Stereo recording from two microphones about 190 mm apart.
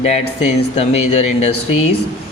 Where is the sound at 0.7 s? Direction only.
35° left (ahead or behind).